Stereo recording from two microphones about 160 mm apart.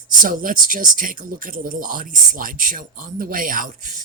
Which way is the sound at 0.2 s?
60° right (ahead or behind).